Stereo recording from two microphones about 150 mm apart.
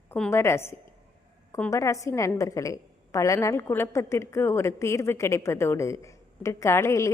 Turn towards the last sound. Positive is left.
turn(degrees=20)  # may be behind; listen again after turning